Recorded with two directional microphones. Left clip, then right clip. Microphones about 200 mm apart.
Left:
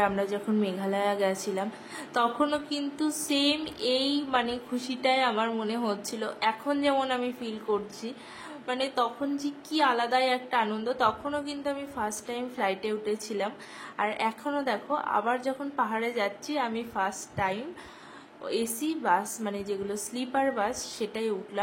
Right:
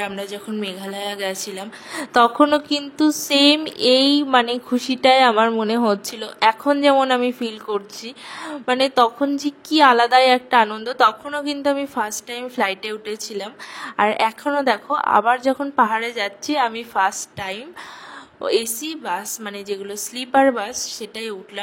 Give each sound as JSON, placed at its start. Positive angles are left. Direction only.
{"t": 0.0, "sound": "a woman's voice", "side_deg": -10}
{"t": 0.6, "sound": "a woman's voice", "side_deg": -50}
{"t": 5.5, "sound": "a woman's voice", "side_deg": -35}
{"t": 18.4, "sound": "a woman's voice", "side_deg": -45}